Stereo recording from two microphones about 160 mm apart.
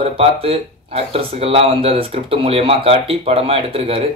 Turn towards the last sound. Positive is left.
turn(degrees=-35)  # may be behind; listen again after turning